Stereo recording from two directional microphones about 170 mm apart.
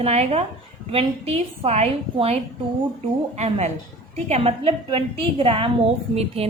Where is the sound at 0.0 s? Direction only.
35° right (ahead or behind).